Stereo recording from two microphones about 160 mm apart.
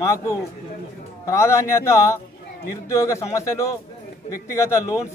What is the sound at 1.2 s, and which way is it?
A man's voice, 15° left (ahead or behind).